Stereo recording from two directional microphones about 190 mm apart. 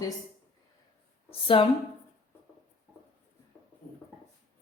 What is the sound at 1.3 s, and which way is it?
Speech, 30° left (ahead or behind).